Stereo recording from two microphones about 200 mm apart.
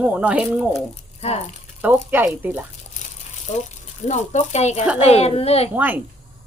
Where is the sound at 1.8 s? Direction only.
10° right (ahead or behind).